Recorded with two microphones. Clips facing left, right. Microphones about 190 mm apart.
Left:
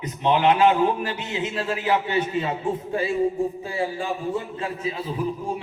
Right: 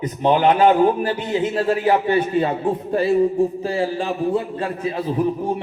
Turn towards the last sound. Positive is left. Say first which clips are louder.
# right 6 dB
turn(degrees=-60)  # may be behind; listen again after turning